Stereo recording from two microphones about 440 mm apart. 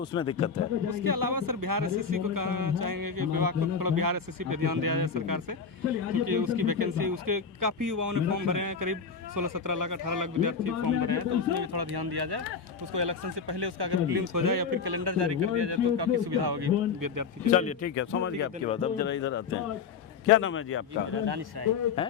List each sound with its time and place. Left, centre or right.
0.0 s a man's voice: centre
0.9 s speech: right
17.5 s a man's voice: centre
17.8 s speech: left
18.7 s a man's voice: centre
19.0 s speech: left
21.1 s speech: right